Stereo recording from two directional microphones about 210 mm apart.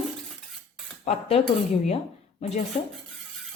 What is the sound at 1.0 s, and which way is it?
Speech, 30° left (ahead or behind).